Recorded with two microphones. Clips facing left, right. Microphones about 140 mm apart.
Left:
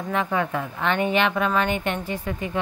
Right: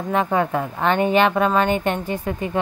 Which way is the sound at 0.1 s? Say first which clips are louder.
Right 4 dB; 35° right (ahead or behind).